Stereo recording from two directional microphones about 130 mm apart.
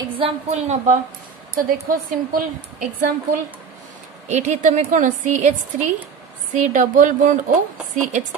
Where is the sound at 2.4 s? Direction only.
85° right.